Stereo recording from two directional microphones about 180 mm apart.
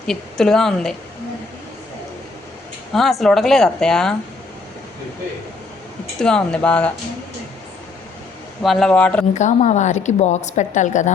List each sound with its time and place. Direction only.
0.1 s speech: 5° left (ahead or behind)
2.9 s speech: centre (ahead or behind)
6.1 s speech: 5° left (ahead or behind)
8.6 s speech: centre (ahead or behind)
9.3 s a woman's voice: 40° left (ahead or behind)